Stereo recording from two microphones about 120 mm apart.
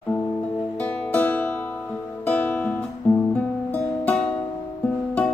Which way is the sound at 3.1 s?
25° left (ahead or behind).